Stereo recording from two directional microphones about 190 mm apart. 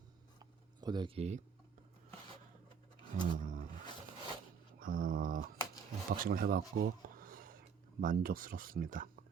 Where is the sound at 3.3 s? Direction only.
45° right (ahead or behind).